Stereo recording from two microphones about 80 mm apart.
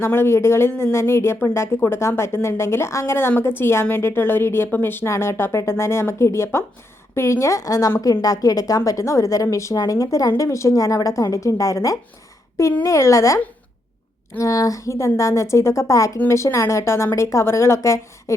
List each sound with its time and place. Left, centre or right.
0.0 s a woman's voice: left